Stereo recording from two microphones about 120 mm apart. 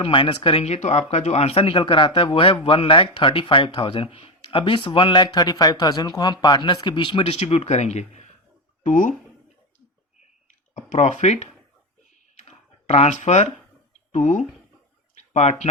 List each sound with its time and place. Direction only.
0.0 s speech: 45° left (ahead or behind)
7.3 s speech: 60° left (ahead or behind)
8.8 s speech: 90° left
10.8 s speech: 75° left (ahead or behind)
12.4 s a sound: 65° left (ahead or behind)
14.1 s speech: 90° left
15.1 s a sound: 70° left (ahead or behind)